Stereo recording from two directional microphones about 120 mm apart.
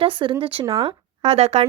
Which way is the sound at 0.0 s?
45° right (ahead or behind).